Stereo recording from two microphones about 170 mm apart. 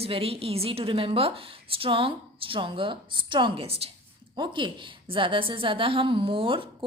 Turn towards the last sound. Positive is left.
turn(degrees=-30)  # may be behind; listen again after turning